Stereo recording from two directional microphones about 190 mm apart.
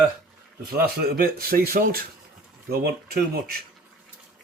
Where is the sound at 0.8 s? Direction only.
50° right (ahead or behind).